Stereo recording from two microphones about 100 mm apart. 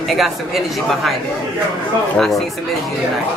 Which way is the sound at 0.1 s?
Centre (ahead or behind).